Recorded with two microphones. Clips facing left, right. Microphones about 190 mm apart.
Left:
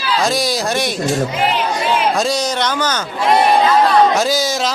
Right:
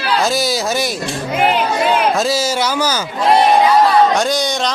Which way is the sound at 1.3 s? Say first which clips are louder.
Right 2 dB; 55° right (ahead or behind).